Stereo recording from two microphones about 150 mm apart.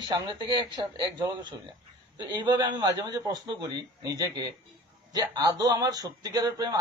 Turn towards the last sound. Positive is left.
turn(degrees=-25)  # may be behind; listen again after turning